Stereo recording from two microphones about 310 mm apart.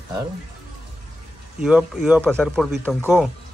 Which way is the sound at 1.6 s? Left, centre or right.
Centre.